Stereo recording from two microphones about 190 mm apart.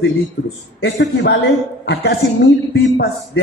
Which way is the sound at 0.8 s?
65° left (ahead or behind).